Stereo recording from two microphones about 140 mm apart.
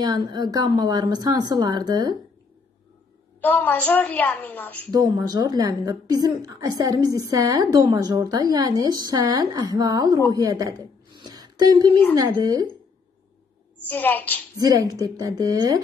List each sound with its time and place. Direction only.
0.0 s a woman's voice: 30° right (ahead or behind)
3.3 s a woman's voice: 10° left (ahead or behind)
4.9 s a woman's voice: 30° right (ahead or behind)
11.1 s a sound: 30° right (ahead or behind)
12.2 s a woman's voice: 25° right (ahead or behind)
13.8 s a woman's voice: 15° left (ahead or behind)
14.6 s a woman's voice: 25° right (ahead or behind)